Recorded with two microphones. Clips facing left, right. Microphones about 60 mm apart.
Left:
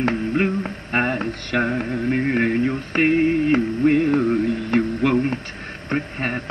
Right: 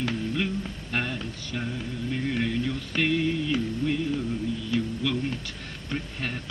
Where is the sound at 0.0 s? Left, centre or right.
Left.